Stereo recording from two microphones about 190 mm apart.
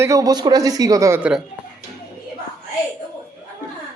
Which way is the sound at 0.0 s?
15° right (ahead or behind).